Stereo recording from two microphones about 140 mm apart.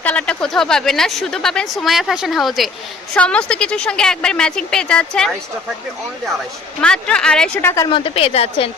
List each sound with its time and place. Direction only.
0.0 s a woman's voice: 10° left (ahead or behind)
6.8 s speech: 5° left (ahead or behind)
7.6 s a woman's voice: 20° left (ahead or behind)
7.9 s a woman's voice: 40° left (ahead or behind)